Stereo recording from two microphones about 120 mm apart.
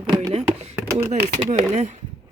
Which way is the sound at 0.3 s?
60° right (ahead or behind).